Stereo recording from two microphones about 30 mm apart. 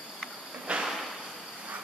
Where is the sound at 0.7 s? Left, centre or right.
Right.